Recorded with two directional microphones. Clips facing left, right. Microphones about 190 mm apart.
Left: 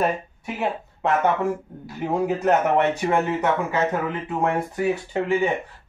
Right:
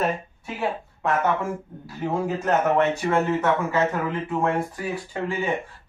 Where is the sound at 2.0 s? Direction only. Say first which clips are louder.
Left 2 dB; 15° left (ahead or behind).